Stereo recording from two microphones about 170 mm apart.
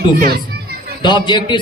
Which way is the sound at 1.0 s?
25° left (ahead or behind).